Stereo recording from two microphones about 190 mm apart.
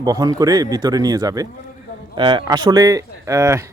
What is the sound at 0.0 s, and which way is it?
Speech, 20° right (ahead or behind).